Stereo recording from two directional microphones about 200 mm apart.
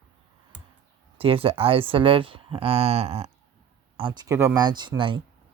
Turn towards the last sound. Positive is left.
turn(degrees=-25)  # may be behind; listen again after turning